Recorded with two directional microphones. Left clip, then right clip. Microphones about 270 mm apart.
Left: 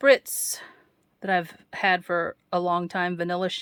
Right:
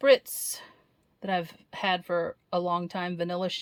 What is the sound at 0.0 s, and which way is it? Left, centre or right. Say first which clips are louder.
A woman's voice: left 2 dB; centre.